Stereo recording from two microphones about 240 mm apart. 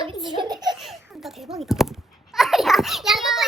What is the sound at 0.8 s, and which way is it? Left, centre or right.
Babbling, centre.